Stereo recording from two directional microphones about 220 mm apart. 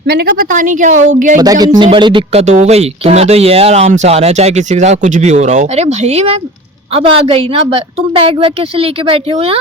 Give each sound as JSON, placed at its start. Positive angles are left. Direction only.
{"t": 0.1, "sound": "speech", "side_deg": -40}
{"t": 1.4, "sound": "speech", "side_deg": -15}